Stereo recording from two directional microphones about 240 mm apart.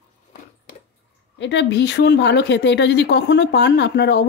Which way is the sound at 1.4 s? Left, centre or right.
Left.